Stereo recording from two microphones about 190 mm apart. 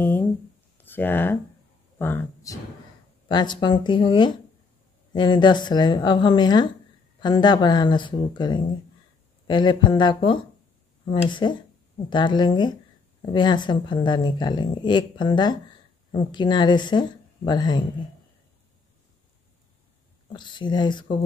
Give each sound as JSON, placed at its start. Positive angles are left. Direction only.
{"t": 0.0, "sound": "a sound", "side_deg": 10}
{"t": 0.7, "sound": "speech", "side_deg": 10}
{"t": 20.3, "sound": "speech", "side_deg": 25}